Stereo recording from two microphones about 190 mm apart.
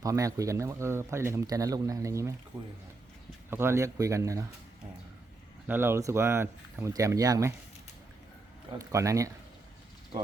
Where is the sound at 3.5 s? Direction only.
15° right (ahead or behind).